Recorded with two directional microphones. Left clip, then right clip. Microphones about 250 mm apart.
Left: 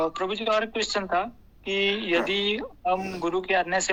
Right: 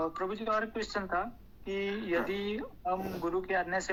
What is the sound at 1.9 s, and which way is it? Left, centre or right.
Speech, left.